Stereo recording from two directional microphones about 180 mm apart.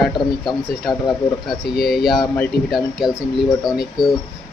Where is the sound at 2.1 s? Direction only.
Centre (ahead or behind).